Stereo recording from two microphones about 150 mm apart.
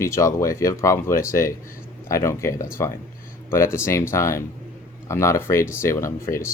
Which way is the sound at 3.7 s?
20° left (ahead or behind).